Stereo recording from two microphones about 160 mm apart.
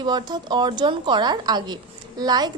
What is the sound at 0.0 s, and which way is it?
A woman's voice, 30° right (ahead or behind).